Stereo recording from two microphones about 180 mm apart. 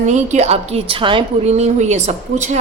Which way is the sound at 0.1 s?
40° right (ahead or behind).